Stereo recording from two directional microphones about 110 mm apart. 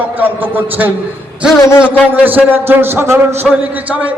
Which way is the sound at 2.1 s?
15° right (ahead or behind).